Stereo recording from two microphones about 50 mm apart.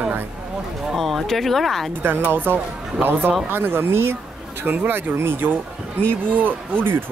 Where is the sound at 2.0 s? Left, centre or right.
Right.